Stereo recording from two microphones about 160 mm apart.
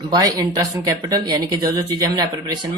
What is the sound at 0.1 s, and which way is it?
Speech, 20° right (ahead or behind).